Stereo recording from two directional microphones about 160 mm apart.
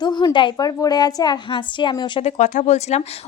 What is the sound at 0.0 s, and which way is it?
A woman's voice, 25° left (ahead or behind).